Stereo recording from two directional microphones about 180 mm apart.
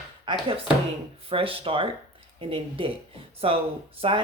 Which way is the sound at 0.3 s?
30° right (ahead or behind).